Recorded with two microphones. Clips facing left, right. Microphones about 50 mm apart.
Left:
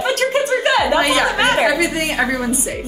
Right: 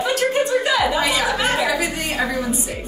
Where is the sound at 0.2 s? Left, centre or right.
Left.